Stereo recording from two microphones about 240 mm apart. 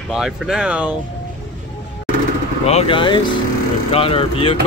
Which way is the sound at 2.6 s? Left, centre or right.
Left.